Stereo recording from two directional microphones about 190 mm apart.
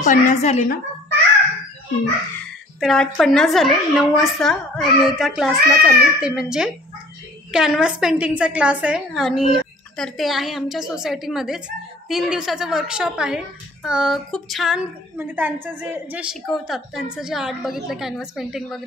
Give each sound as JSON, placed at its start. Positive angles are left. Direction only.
{"t": 0.0, "sound": "a woman's voice", "side_deg": 40}
{"t": 2.8, "sound": "a woman's voice", "side_deg": 0}